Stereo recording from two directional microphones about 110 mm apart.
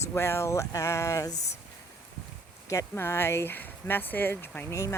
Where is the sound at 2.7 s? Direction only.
25° left (ahead or behind).